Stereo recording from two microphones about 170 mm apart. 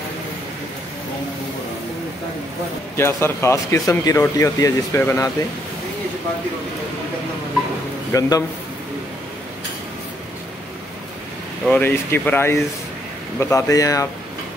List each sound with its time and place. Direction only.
3.0 s speech: 15° left (ahead or behind)
8.1 s speech: 20° left (ahead or behind)
11.6 s speech: 10° left (ahead or behind)